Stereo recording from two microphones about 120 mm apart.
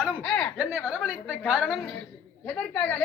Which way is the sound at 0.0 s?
10° left (ahead or behind).